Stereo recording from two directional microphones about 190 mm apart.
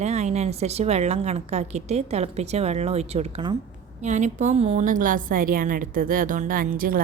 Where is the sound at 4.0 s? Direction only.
40° right (ahead or behind).